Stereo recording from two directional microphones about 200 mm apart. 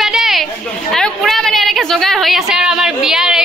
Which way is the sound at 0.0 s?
Centre (ahead or behind).